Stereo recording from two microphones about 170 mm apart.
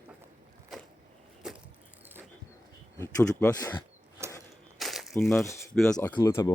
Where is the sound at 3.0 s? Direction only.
15° left (ahead or behind).